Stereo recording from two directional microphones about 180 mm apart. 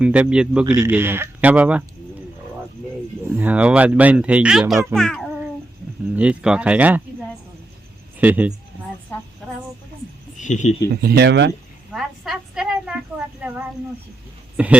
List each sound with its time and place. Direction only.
0.0 s a man's voice: 5° right (ahead or behind)
0.6 s speech: 20° right (ahead or behind)
3.2 s a man's voice: 10° right (ahead or behind)
8.2 s speech: 10° right (ahead or behind)
10.3 s a sound: 40° left (ahead or behind)
11.0 s speech: 65° right (ahead or behind)
11.9 s a sound: centre (ahead or behind)
14.5 s speech: 5° right (ahead or behind)